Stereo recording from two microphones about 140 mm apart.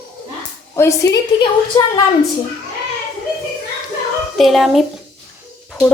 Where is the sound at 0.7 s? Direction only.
20° left (ahead or behind).